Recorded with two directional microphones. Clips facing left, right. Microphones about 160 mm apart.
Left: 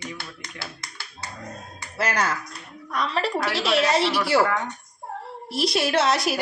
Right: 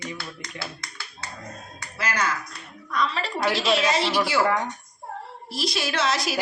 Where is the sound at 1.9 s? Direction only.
70° left (ahead or behind).